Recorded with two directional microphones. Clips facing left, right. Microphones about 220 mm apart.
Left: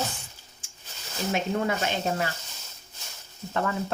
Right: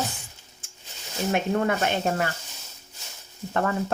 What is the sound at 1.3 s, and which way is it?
Speech, 55° right (ahead or behind).